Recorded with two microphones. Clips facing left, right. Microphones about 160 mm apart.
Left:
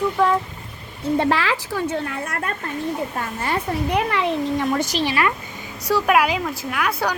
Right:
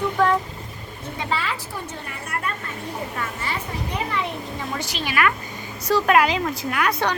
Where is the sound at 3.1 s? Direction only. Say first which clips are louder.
Left 4 dB; 50° left (ahead or behind).